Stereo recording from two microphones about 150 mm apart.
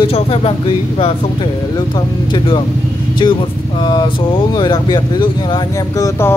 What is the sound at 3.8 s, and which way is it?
Speech, 30° left (ahead or behind).